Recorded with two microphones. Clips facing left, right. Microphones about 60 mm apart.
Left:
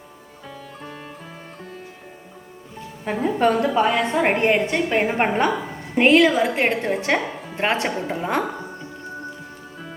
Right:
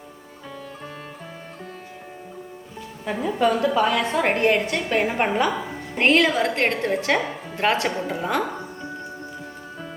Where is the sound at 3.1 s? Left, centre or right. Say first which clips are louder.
Left 2 dB; left.